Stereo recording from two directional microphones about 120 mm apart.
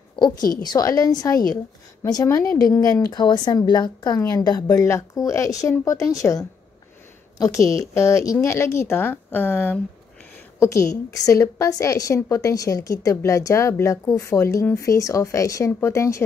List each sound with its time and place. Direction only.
0.1 s a woman's voice: 35° left (ahead or behind)